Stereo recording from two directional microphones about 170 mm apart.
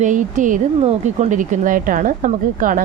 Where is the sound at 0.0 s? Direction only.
50° right (ahead or behind).